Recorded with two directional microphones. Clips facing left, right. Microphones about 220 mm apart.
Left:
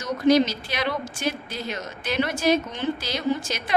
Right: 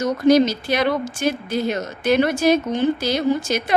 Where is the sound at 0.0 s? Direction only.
45° right (ahead or behind).